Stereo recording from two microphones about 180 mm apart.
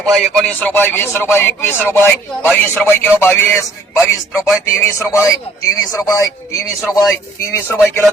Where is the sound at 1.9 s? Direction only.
15° right (ahead or behind).